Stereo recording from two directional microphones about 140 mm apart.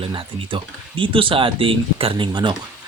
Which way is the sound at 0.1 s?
35° right (ahead or behind).